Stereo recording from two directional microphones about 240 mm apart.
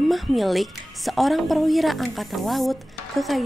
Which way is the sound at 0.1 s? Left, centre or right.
Centre.